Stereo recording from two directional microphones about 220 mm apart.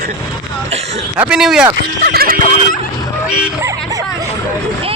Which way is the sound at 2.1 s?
40° right (ahead or behind).